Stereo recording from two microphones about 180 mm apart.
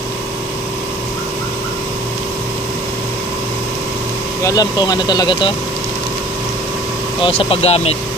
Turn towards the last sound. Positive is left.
turn(degrees=35)  # may be behind; listen again after turning